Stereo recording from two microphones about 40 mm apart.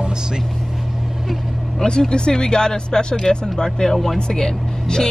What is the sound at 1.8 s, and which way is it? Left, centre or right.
Speech, centre.